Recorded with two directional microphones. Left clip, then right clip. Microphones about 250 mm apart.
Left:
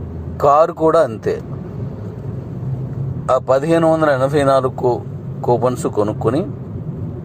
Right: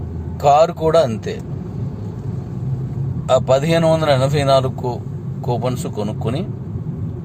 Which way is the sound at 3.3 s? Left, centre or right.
Centre.